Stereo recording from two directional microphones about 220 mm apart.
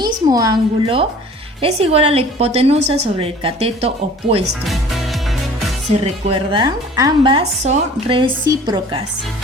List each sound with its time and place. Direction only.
0.0 s a woman's voice: 15° right (ahead or behind)
4.6 s music: centre (ahead or behind)
6.5 s a woman's voice: 20° right (ahead or behind)